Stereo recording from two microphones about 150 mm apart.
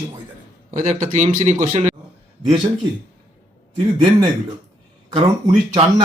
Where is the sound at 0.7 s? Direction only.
50° right (ahead or behind).